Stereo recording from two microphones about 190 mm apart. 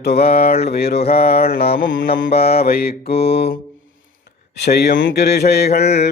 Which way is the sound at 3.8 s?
65° left (ahead or behind).